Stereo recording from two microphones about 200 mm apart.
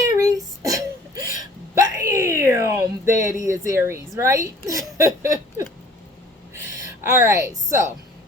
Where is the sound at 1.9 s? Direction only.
15° right (ahead or behind).